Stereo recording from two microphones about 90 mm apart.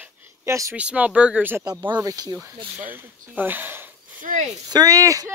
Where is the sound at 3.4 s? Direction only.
20° right (ahead or behind).